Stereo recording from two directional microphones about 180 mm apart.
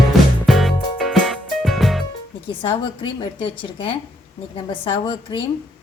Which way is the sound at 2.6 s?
30° left (ahead or behind).